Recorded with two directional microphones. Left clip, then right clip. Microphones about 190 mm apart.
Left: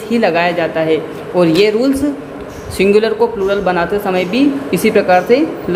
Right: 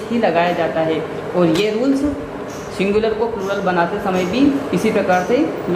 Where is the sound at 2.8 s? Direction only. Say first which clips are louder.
Left 6 dB; 60° left (ahead or behind).